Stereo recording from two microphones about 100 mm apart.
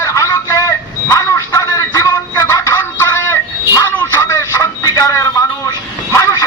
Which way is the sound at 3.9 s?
15° left (ahead or behind).